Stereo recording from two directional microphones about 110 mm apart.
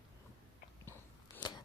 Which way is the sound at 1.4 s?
40° left (ahead or behind).